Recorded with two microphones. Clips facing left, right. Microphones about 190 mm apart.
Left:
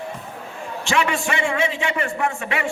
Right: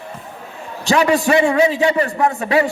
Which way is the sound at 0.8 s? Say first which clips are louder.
Right 7 dB; 35° right (ahead or behind).